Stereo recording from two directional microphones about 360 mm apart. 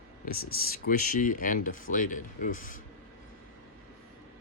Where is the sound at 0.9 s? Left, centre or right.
Left.